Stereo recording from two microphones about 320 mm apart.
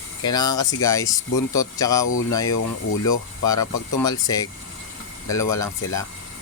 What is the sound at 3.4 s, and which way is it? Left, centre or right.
Speech, centre.